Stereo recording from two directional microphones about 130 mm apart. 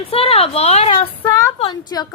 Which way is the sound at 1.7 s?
30° left (ahead or behind).